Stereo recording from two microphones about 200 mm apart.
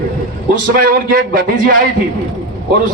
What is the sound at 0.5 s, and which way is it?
A man's voice, 45° right (ahead or behind).